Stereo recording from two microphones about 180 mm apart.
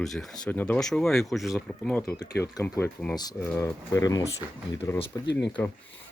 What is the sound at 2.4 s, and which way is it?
Speech, 15° left (ahead or behind).